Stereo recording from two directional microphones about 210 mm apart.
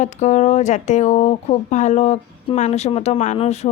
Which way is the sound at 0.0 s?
35° left (ahead or behind).